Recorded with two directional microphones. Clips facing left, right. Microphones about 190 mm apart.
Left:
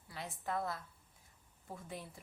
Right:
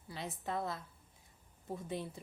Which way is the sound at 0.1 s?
20° right (ahead or behind).